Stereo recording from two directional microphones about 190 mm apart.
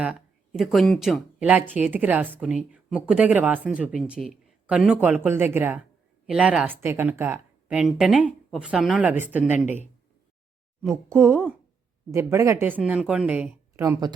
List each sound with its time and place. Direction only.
0.0 s speech: 5° right (ahead or behind)
10.9 s speech: 15° right (ahead or behind)